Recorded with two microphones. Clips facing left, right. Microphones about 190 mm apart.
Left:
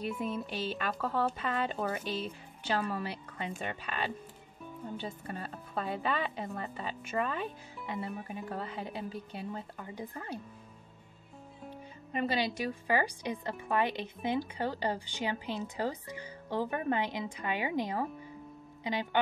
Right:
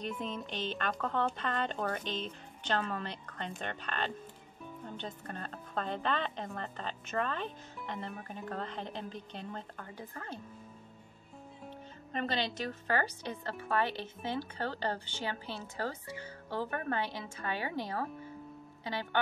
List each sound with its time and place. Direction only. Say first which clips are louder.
0.0 s speech: left 3 dB; 10° left (ahead or behind)
12.1 s speech: left 3 dB; 10° left (ahead or behind)